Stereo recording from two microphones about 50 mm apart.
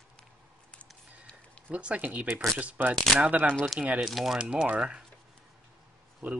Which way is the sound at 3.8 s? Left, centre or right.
Right.